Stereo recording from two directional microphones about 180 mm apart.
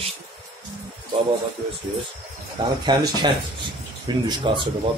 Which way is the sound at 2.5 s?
25° right (ahead or behind).